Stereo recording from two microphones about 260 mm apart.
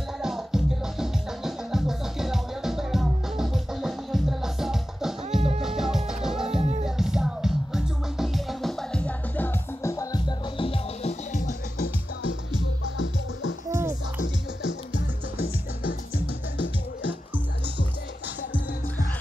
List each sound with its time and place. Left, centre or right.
0.2 s music: centre; by 11.9 s left
12.9 s music: left
13.7 s music: centre